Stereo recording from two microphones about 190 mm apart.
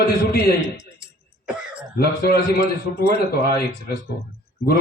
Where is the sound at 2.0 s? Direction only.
55° left (ahead or behind).